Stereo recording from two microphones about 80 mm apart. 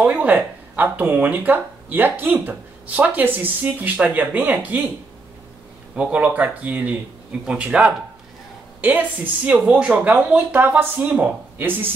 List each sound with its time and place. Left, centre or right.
0.0 s speech: centre
5.9 s speech: centre